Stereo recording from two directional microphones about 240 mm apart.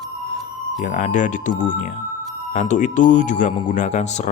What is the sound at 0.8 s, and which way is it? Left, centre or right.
Speech, left.